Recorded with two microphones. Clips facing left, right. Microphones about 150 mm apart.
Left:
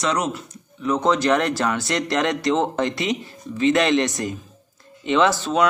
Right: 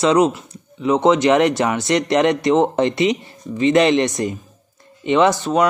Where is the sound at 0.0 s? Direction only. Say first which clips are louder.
Right 8 dB; 30° right (ahead or behind).